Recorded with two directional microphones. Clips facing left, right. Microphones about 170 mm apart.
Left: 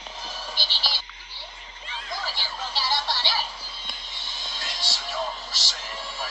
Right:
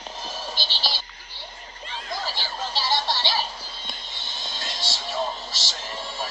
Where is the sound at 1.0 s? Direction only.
45° right (ahead or behind).